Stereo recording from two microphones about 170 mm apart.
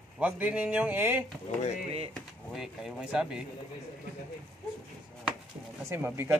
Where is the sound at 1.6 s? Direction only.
40° left (ahead or behind).